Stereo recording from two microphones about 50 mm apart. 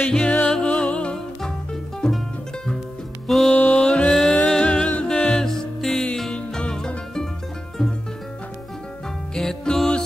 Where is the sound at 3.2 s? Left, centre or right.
Centre.